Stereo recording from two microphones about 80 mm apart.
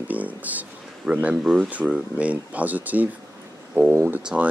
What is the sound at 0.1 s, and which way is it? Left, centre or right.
Speech, centre.